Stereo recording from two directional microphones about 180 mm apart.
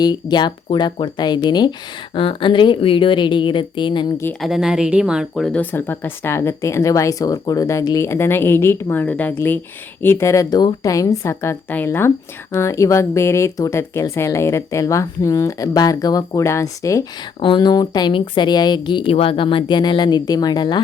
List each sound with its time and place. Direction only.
0.0 s speech: 25° left (ahead or behind)
4.4 s a woman's voice: centre (ahead or behind); by 20.8 s 25° left (ahead or behind)